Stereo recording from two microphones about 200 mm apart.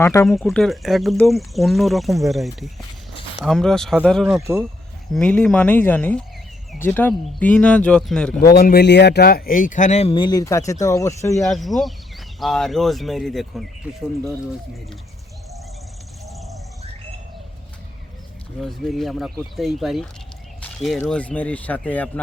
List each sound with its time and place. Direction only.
0.0 s speech: 15° left (ahead or behind)
0.3 s speech: centre (ahead or behind)
8.4 s speech: 50° left (ahead or behind); by 11.4 s 15° left (ahead or behind)
11.4 s speech: centre (ahead or behind)
18.6 s speech: centre (ahead or behind)